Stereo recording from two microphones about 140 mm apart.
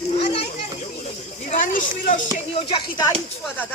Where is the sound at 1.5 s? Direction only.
70° left (ahead or behind).